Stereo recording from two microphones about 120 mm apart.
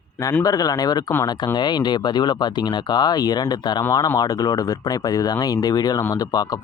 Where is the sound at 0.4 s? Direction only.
30° left (ahead or behind).